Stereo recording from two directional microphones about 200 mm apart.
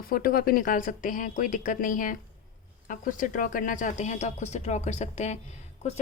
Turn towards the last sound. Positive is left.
turn(degrees=35)  # may be behind; listen again after turning